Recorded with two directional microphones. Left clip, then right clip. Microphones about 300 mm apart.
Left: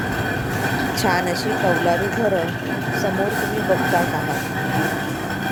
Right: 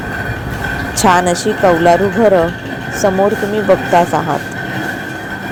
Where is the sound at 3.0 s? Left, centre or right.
Right.